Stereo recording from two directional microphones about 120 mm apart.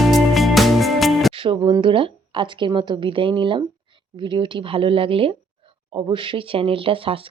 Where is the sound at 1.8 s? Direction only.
45° right (ahead or behind).